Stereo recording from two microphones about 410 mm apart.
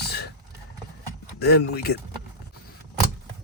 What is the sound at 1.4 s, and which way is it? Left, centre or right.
Speech, left.